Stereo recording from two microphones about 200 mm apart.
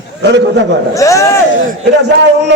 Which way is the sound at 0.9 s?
15° left (ahead or behind).